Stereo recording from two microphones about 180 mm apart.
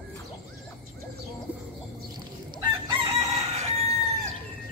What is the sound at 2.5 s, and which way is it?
Chicken, 30° right (ahead or behind).